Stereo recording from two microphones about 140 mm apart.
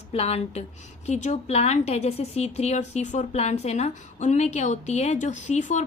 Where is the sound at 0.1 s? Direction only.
45° left (ahead or behind).